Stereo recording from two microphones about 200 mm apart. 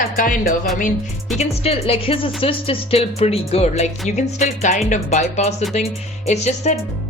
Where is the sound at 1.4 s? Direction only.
30° left (ahead or behind).